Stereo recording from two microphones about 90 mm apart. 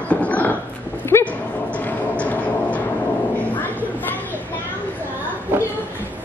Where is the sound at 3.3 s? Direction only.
20° left (ahead or behind).